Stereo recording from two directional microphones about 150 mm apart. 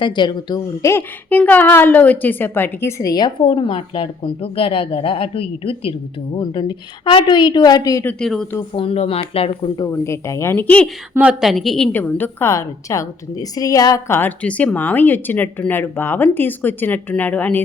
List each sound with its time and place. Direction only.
0.0 s a woman's voice: 30° left (ahead or behind)
8.0 s a woman's voice: 5° left (ahead or behind)
8.7 s a woman's voice: 40° left (ahead or behind)
9.8 s a woman's voice: 20° left (ahead or behind)
11.1 s a woman's voice: 10° right (ahead or behind)
11.9 s a woman's voice: 10° left (ahead or behind)